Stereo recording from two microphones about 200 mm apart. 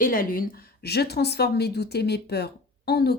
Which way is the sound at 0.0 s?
45° left (ahead or behind).